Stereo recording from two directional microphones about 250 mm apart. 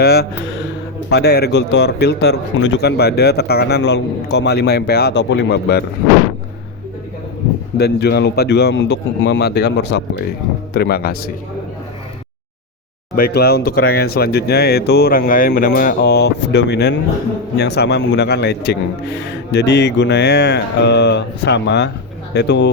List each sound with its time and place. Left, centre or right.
0.0 s a man's voice: left
7.8 s a man's voice: left
13.1 s a man's voice: left